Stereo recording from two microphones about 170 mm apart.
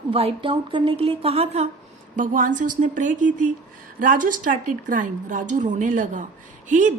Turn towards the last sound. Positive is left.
turn(degrees=-50)  # may be behind; listen again after turning